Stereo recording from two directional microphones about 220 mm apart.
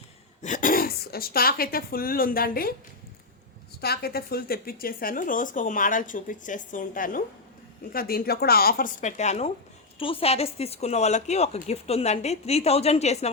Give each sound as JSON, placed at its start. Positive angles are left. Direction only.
{"t": 0.4, "sound": "speech", "side_deg": 35}
{"t": 3.8, "sound": "a woman's voice", "side_deg": 45}